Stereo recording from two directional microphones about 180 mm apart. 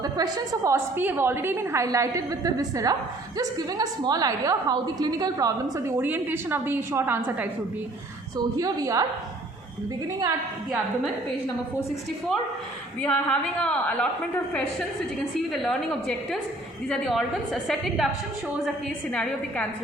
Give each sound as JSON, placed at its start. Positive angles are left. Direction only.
{"t": 0.0, "sound": "a woman's voice", "side_deg": -20}
{"t": 8.4, "sound": "a woman's voice", "side_deg": -20}
{"t": 13.0, "sound": "a woman's voice", "side_deg": 5}
{"t": 15.5, "sound": "a woman's voice", "side_deg": 0}
{"t": 19.1, "sound": "a woman's voice", "side_deg": 5}